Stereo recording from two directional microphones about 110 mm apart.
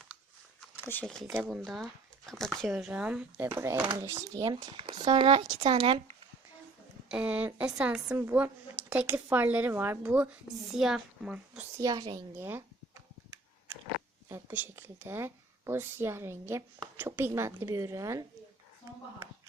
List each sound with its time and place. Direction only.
1.0 s speech: 5° left (ahead or behind); by 3.5 s 10° right (ahead or behind)
3.5 s speech: 25° right (ahead or behind)
4.8 s speech: 45° right (ahead or behind); by 6.1 s 60° right (ahead or behind)
7.1 s speech: 10° right (ahead or behind)
8.2 s speech: 20° right (ahead or behind)
11.8 s a child's voice: 35° right (ahead or behind)
12.4 s speech: 20° right (ahead or behind)
14.3 s speech: 20° right (ahead or behind)